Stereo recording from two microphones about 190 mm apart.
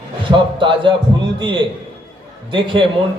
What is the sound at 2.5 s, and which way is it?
Speech, 25° right (ahead or behind).